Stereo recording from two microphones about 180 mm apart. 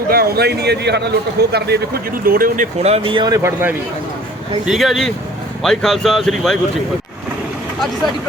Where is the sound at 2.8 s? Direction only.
30° right (ahead or behind); by 3.8 s 15° right (ahead or behind).